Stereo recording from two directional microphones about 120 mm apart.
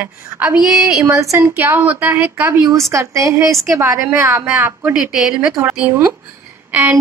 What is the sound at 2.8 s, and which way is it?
A woman's voice, 25° right (ahead or behind).